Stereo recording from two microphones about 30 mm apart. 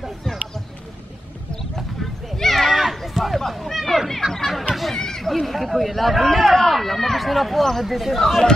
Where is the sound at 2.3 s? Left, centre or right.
Centre.